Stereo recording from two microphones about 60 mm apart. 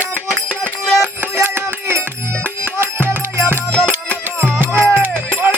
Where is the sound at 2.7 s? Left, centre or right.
Right.